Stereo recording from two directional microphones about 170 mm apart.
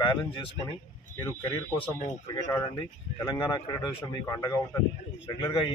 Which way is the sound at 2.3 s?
20° left (ahead or behind).